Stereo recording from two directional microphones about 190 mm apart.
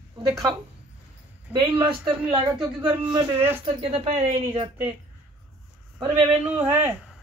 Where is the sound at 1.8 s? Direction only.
25° right (ahead or behind).